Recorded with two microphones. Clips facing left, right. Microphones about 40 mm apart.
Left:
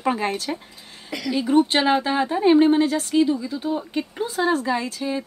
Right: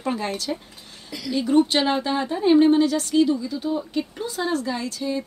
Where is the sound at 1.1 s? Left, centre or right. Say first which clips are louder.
Left 2 dB; left.